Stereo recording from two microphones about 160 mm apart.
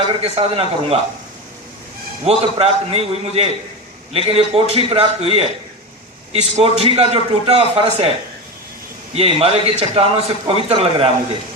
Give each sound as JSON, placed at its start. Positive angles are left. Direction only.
{"t": 0.2, "sound": "a man's voice", "side_deg": -35}
{"t": 2.2, "sound": "a man's voice", "side_deg": -40}
{"t": 9.1, "sound": "a man's voice", "side_deg": -35}